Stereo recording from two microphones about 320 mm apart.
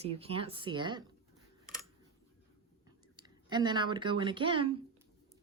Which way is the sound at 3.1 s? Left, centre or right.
Centre.